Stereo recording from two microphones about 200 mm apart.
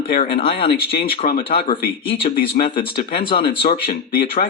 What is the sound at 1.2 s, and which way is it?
Speech, 45° left (ahead or behind).